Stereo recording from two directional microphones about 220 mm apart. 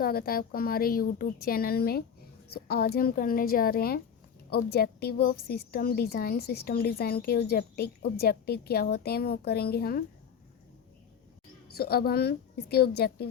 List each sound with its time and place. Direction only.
0.0 s a woman's voice: 45° left (ahead or behind)
11.7 s a woman's voice: 45° left (ahead or behind)